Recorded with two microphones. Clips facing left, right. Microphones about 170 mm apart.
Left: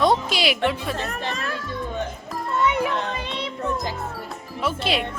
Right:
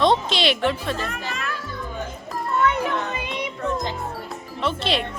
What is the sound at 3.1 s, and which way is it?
Music, 10° right (ahead or behind).